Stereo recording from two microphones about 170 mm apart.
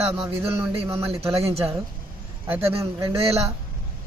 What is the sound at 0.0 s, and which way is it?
Speech, 10° right (ahead or behind).